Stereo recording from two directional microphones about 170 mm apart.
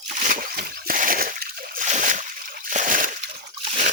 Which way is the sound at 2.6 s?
50° right (ahead or behind).